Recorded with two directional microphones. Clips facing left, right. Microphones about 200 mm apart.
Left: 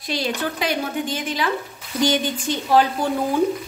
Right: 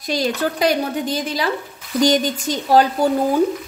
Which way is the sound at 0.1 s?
40° right (ahead or behind).